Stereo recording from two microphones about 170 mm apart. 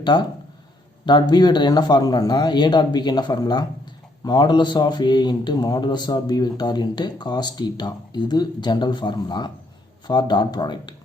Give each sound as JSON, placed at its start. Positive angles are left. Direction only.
{"t": 1.0, "sound": "speech", "side_deg": 25}